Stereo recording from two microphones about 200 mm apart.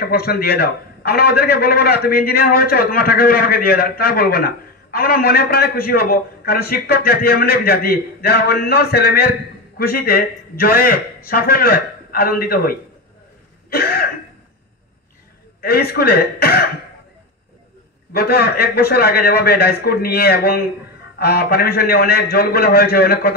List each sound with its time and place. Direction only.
0.0 s a man's voice: 50° left (ahead or behind)
13.7 s cough: 50° left (ahead or behind)
15.6 s a man's voice: 50° left (ahead or behind)
18.1 s a man's voice: 50° left (ahead or behind)